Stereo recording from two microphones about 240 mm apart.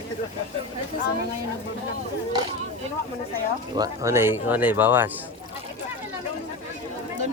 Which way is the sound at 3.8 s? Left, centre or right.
Centre.